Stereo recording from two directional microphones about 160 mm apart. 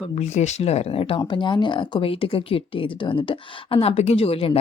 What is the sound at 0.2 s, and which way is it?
Speech, 45° left (ahead or behind).